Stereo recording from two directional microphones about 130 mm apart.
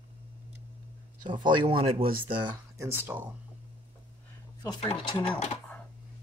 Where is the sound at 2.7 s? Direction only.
20° right (ahead or behind).